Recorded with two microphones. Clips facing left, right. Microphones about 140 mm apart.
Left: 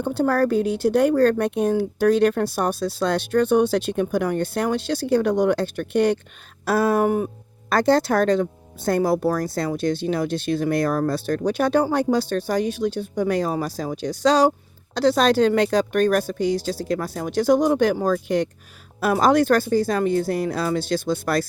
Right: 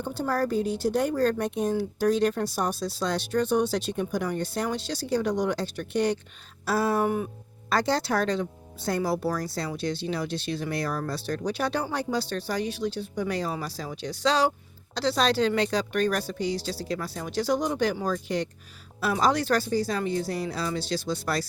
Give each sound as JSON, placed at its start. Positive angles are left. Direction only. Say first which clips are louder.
{"t": 0.0, "sound": "speech", "louder": "left 7 dB", "side_deg": 65}